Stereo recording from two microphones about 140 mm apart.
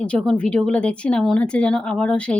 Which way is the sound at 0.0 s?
5° left (ahead or behind).